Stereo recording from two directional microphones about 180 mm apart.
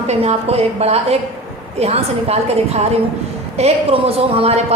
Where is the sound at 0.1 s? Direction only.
35° right (ahead or behind).